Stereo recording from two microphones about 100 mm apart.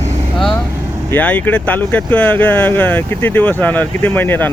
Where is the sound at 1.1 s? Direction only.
15° left (ahead or behind).